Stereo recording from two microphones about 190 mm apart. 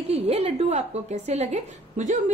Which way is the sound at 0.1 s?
30° right (ahead or behind).